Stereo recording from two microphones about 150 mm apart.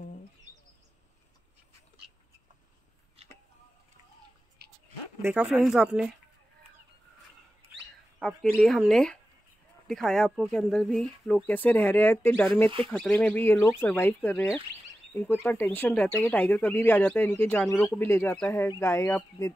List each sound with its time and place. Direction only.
3.2 s a sound: 45° right (ahead or behind)
5.2 s speech: 5° right (ahead or behind)
8.2 s speech: centre (ahead or behind); by 19.5 s 20° left (ahead or behind)